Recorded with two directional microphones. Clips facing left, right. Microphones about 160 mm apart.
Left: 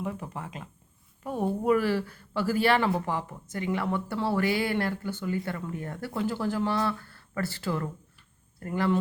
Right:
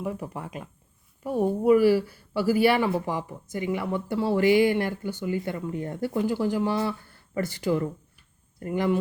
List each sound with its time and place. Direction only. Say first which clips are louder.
0.0 s a woman's voice: right 3 dB; 10° right (ahead or behind)